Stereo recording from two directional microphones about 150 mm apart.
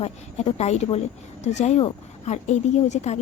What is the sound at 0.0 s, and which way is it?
A woman's voice, 45° left (ahead or behind).